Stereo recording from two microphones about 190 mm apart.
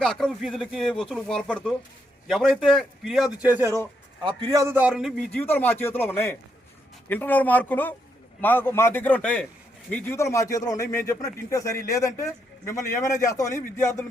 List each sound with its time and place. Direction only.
0.0 s speech: 5° left (ahead or behind)
4.3 s a man's voice: 20° right (ahead or behind); by 13.5 s 15° left (ahead or behind)
13.5 s speech: 40° left (ahead or behind)